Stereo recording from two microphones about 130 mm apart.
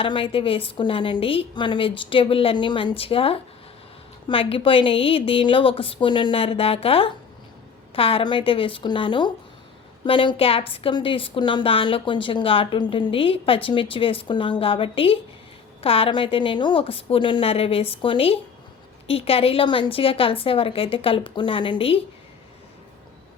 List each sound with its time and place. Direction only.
0.0 s a woman's voice: 40° left (ahead or behind)